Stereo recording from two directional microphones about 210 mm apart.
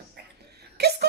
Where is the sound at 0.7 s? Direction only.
50° right (ahead or behind).